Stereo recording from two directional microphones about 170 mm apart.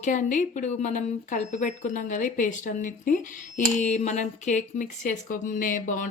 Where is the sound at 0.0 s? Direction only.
50° left (ahead or behind).